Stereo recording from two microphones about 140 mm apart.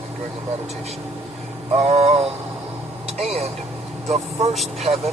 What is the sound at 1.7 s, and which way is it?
Speech, 50° right (ahead or behind).